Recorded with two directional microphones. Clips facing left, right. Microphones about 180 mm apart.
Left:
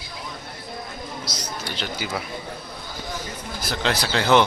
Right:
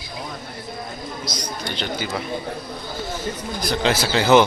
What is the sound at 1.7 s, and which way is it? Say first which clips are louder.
Speech: right 3 dB; 5° left (ahead or behind).